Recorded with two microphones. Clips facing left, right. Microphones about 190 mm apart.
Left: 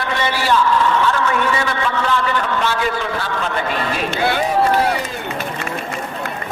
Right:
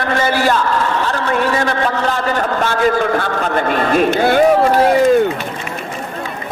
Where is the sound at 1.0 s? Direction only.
35° right (ahead or behind).